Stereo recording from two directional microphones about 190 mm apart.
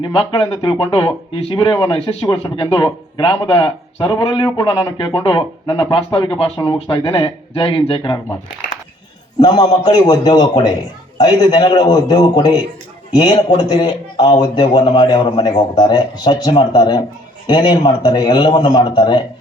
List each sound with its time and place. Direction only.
0.0 s a man's voice: 25° left (ahead or behind)
9.4 s a man's voice: 20° left (ahead or behind)